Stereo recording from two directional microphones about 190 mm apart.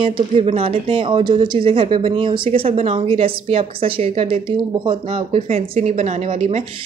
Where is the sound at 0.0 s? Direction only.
30° right (ahead or behind).